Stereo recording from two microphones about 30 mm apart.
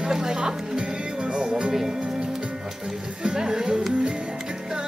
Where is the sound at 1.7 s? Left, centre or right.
Centre.